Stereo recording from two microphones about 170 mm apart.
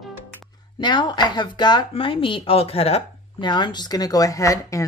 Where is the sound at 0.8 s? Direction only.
25° left (ahead or behind).